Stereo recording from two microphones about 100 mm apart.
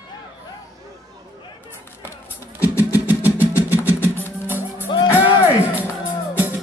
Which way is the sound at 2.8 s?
20° right (ahead or behind).